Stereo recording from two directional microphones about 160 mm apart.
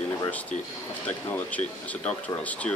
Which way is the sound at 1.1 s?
10° left (ahead or behind).